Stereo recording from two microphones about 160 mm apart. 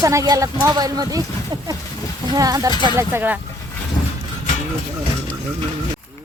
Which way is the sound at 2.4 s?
20° right (ahead or behind).